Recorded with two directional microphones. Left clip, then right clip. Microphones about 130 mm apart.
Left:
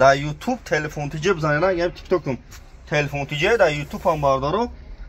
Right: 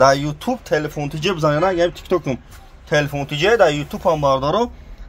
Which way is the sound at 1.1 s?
30° right (ahead or behind).